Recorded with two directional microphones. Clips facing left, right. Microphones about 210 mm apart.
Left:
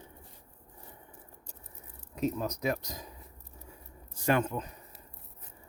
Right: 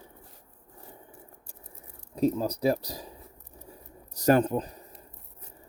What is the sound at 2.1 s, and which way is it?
Speech, 30° right (ahead or behind).